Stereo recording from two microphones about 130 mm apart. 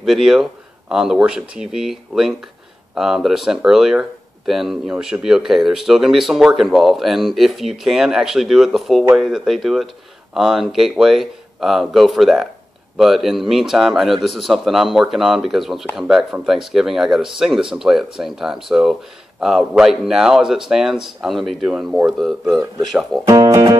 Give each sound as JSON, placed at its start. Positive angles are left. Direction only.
{"t": 0.0, "sound": "speech", "side_deg": -5}
{"t": 23.2, "sound": "speech", "side_deg": -30}